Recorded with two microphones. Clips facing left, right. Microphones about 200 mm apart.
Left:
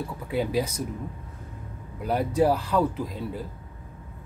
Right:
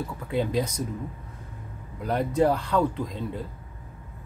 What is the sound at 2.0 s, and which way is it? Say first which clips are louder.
Speech: even; 5° left (ahead or behind).